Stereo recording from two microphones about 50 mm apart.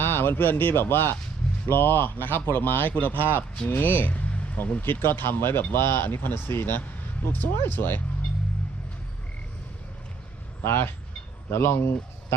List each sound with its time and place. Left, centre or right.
0.0 s speech: left
10.6 s speech: left